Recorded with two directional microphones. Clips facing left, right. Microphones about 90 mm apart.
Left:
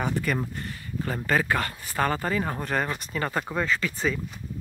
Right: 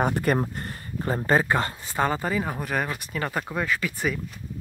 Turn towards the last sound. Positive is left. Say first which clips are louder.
# even
turn(degrees=-10)  # may be behind; listen again after turning